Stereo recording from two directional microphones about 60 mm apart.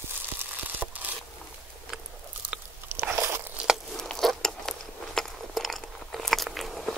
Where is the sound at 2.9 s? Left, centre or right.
Right.